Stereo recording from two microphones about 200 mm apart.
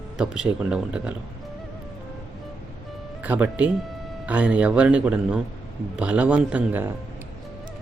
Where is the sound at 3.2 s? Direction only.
5° right (ahead or behind).